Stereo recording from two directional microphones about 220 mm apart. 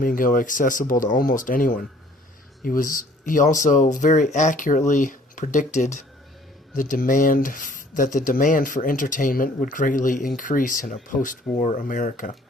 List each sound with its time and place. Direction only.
0.0 s speech: 40° left (ahead or behind)